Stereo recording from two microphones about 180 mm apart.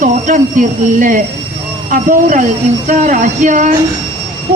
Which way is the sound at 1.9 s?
45° right (ahead or behind).